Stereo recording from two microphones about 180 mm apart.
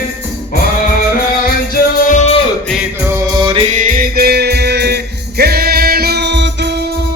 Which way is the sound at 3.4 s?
30° right (ahead or behind).